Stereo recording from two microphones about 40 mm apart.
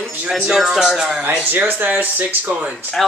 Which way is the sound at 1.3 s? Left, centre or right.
Right.